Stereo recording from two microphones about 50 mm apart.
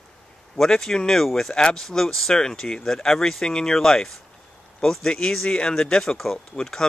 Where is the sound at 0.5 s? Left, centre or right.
Centre.